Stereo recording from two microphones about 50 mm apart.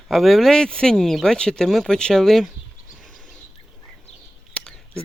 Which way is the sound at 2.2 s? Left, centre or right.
Centre.